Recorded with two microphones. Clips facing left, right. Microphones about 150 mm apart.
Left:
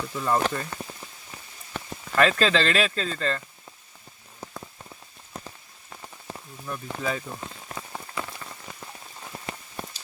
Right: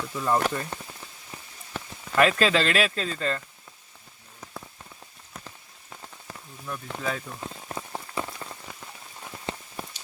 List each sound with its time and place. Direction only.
0.0 s speech: centre (ahead or behind)
0.4 s speech: 15° right (ahead or behind)
1.7 s a sound: 5° right (ahead or behind)
2.4 s speech: 5° right (ahead or behind)
6.3 s rain on surface: 25° left (ahead or behind)
6.9 s speech: centre (ahead or behind)
7.7 s rain on surface: 20° right (ahead or behind)
9.8 s rain on surface: 5° right (ahead or behind)